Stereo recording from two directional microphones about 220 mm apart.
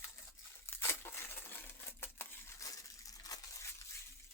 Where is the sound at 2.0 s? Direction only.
15° left (ahead or behind).